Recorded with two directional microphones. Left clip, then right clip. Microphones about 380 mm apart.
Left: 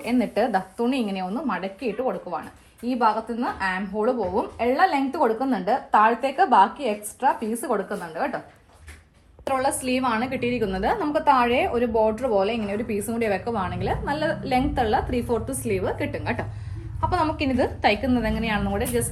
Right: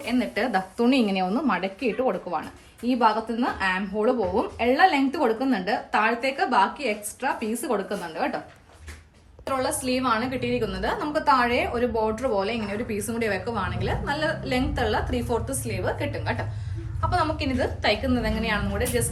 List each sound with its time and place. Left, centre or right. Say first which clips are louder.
0.0 s a woman's voice: left 3 dB; centre
0.4 s a woman's voice: even; centre
9.5 s a woman's voice: left 2 dB; centre